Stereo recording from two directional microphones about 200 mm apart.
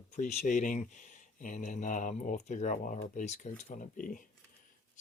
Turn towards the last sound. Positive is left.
turn(degrees=40)  # may be behind; listen again after turning